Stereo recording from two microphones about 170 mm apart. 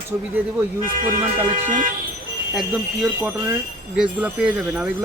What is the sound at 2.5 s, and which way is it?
Speech, 5° right (ahead or behind).